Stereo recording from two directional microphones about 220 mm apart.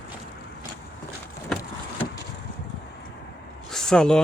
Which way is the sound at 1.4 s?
5° left (ahead or behind).